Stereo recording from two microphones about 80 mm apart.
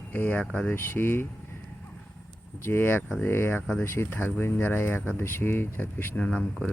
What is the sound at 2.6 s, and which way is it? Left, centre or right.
Speech, left.